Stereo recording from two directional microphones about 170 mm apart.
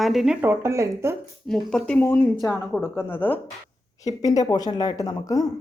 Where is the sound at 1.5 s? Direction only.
5° left (ahead or behind).